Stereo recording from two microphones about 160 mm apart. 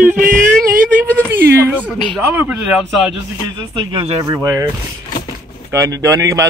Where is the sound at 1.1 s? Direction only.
15° right (ahead or behind).